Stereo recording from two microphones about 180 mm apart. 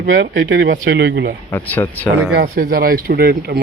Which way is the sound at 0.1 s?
90° right.